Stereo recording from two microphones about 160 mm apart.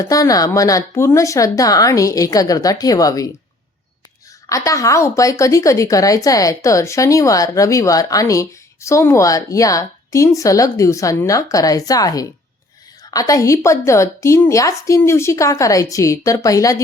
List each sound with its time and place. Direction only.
0.0 s a woman's voice: 20° left (ahead or behind)
4.4 s a woman's voice: 20° left (ahead or behind)